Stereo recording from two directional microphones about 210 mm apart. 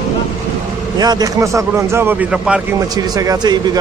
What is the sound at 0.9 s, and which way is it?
A man's voice, 20° right (ahead or behind).